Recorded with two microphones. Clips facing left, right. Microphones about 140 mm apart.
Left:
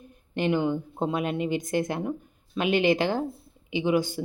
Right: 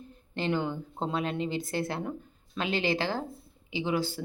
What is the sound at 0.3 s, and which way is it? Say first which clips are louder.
Speech: left 5 dB; 15° left (ahead or behind).